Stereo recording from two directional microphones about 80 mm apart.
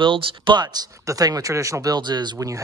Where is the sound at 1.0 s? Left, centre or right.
Right.